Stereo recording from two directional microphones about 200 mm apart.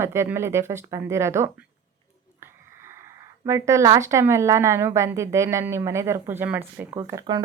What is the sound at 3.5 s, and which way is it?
A woman's voice, 15° right (ahead or behind).